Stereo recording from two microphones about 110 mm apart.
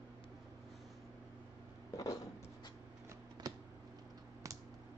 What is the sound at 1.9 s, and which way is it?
Cat, 35° left (ahead or behind).